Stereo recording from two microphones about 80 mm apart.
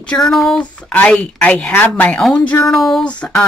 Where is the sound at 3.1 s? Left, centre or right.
Centre.